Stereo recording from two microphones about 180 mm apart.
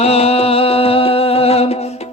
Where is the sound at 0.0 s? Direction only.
35° left (ahead or behind).